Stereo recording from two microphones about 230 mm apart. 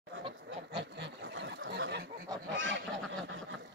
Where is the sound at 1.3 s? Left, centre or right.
Right.